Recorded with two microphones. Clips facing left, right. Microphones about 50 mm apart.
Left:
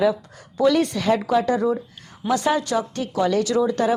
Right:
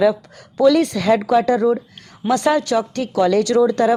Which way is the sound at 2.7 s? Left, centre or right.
Right.